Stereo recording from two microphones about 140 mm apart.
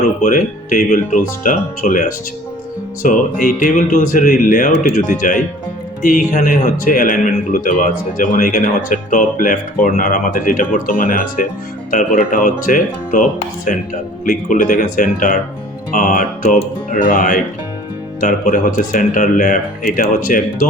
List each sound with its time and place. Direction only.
0.2 s speech: 70° left (ahead or behind); by 11.4 s 90° left
11.9 s speech: 75° left (ahead or behind)
18.2 s speech: 80° left